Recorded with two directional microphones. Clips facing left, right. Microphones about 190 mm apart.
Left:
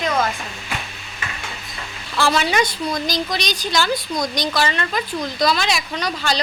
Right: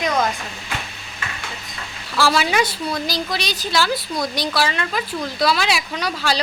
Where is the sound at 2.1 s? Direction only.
5° right (ahead or behind).